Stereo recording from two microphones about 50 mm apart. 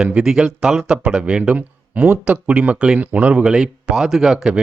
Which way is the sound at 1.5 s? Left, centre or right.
Right.